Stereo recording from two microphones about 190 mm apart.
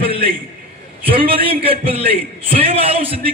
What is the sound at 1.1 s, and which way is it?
A man's voice, 30° right (ahead or behind).